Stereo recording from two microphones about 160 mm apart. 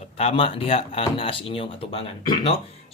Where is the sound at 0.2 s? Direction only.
35° left (ahead or behind).